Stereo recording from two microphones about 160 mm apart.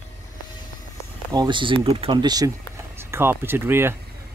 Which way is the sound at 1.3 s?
30° right (ahead or behind).